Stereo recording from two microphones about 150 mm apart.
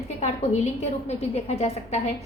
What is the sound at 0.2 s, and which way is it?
A woman's voice, 50° left (ahead or behind).